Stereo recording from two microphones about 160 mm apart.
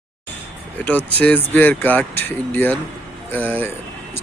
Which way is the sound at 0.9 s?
10° left (ahead or behind).